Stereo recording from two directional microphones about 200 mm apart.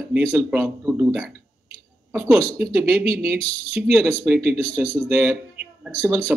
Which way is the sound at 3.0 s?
50° right (ahead or behind).